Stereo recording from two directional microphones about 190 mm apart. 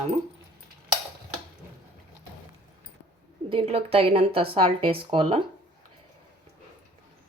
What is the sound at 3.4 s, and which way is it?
Speech, 30° right (ahead or behind).